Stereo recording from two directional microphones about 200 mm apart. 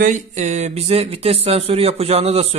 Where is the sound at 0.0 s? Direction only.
40° right (ahead or behind).